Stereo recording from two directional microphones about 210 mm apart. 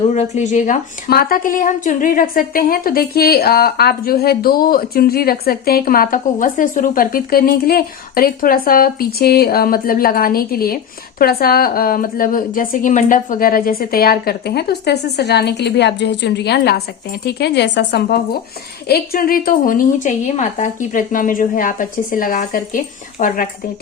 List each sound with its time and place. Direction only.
0.1 s a woman's voice: 35° left (ahead or behind)